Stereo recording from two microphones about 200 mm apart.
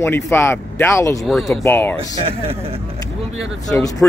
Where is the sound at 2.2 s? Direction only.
30° right (ahead or behind).